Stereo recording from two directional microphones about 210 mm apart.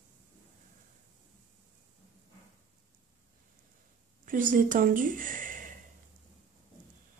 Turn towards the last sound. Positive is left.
turn(degrees=-40)  # may be behind; listen again after turning